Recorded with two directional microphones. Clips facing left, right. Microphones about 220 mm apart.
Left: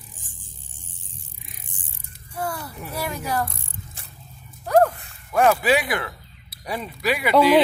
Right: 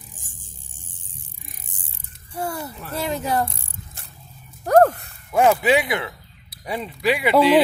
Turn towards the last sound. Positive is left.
turn(degrees=-25)  # may be behind; listen again after turning